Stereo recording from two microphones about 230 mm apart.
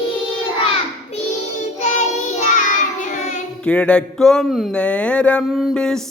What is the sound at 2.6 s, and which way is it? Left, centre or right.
Child singing, left.